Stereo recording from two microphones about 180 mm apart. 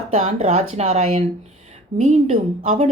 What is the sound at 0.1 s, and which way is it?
Speech, 40° right (ahead or behind).